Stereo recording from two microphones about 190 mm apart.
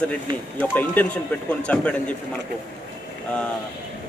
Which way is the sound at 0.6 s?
10° left (ahead or behind).